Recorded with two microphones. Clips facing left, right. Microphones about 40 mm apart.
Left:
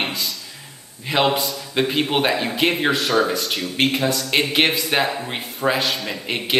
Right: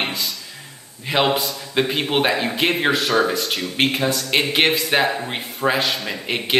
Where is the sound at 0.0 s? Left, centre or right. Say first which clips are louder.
Even; centre.